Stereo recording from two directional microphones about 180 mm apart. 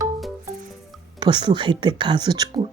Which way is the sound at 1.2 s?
25° right (ahead or behind).